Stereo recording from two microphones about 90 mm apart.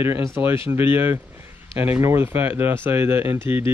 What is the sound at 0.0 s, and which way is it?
Speech, 25° right (ahead or behind).